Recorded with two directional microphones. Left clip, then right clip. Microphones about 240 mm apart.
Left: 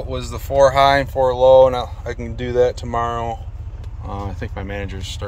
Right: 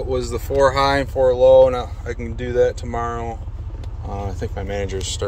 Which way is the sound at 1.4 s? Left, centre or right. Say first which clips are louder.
Left 1 dB; centre.